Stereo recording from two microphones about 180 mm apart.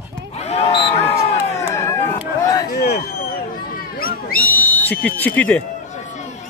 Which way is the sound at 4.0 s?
55° left (ahead or behind).